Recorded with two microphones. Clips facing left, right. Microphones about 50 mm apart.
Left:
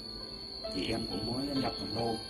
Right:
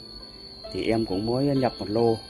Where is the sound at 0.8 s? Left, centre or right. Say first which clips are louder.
Right 11 dB; right.